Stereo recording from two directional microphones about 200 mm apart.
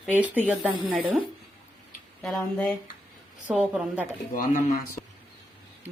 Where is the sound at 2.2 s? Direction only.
5° left (ahead or behind).